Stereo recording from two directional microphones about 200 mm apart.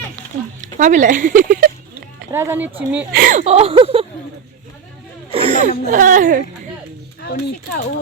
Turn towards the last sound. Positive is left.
turn(degrees=50)  # may be behind; listen again after turning